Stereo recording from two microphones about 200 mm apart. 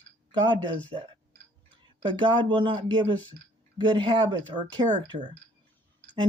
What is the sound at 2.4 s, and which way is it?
Speech, 25° right (ahead or behind).